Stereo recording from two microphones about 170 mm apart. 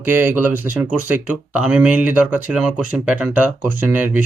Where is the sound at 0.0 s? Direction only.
10° right (ahead or behind).